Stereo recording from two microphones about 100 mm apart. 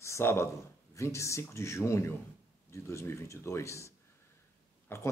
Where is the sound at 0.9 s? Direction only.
30° left (ahead or behind).